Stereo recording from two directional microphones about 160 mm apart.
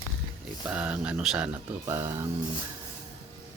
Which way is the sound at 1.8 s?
20° right (ahead or behind).